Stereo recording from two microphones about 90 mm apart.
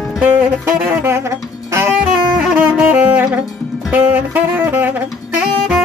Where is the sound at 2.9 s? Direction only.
25° right (ahead or behind).